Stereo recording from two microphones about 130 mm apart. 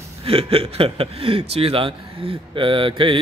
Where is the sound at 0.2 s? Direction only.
50° right (ahead or behind).